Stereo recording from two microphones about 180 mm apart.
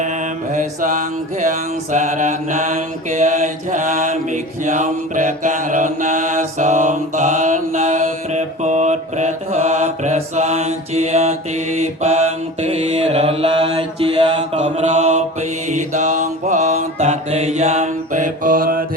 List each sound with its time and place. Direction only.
0.5 s mantra: 45° right (ahead or behind)